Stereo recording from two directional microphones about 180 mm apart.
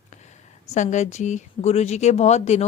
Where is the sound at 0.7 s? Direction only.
40° left (ahead or behind).